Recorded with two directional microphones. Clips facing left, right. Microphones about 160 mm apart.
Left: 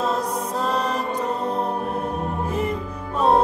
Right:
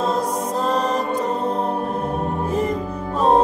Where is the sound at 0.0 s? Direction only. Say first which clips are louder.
Right 2 dB; 35° right (ahead or behind).